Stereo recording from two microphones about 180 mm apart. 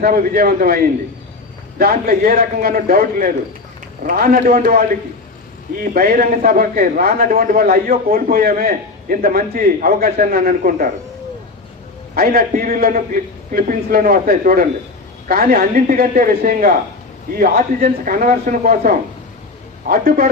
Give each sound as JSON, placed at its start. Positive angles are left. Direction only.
{"t": 0.0, "sound": "a man's voice", "side_deg": -55}
{"t": 1.8, "sound": "a man's voice", "side_deg": -55}
{"t": 12.1, "sound": "a man's voice", "side_deg": -60}
{"t": 19.9, "sound": "a man's voice", "side_deg": -55}